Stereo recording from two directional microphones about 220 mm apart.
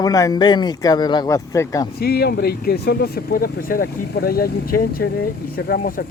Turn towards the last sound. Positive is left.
turn(degrees=40)  # may be behind; listen again after turning